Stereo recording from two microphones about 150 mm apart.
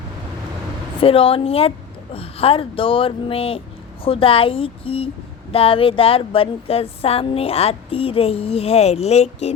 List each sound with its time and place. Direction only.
1.0 s speech: 40° left (ahead or behind)